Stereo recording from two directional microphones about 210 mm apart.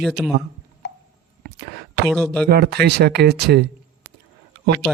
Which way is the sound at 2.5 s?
50° right (ahead or behind).